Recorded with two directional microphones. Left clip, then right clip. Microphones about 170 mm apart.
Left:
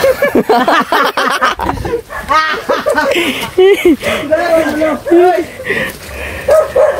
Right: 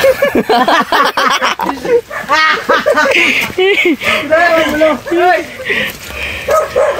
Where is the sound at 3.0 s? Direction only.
30° left (ahead or behind).